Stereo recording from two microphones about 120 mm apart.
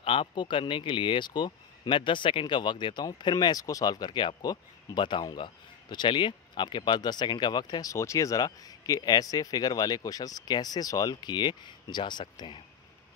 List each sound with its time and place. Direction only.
0.0 s speech: 45° left (ahead or behind)